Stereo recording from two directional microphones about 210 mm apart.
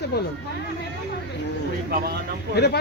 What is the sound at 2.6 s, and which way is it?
Speech, 50° left (ahead or behind).